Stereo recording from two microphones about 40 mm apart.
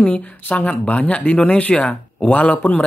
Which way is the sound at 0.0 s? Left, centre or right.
Left.